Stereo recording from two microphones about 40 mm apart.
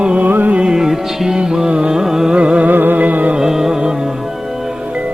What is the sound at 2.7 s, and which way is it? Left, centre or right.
Music, right.